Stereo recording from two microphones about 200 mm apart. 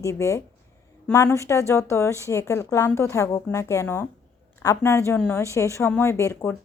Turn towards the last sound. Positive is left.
turn(degrees=15)  # may be behind; listen again after turning